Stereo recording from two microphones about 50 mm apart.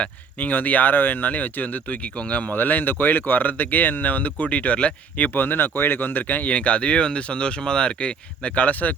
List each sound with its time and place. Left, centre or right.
0.0 s speech: left
5.4 s speech: left
6.5 s speech: left